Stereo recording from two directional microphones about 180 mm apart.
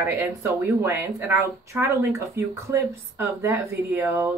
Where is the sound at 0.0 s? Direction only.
15° right (ahead or behind).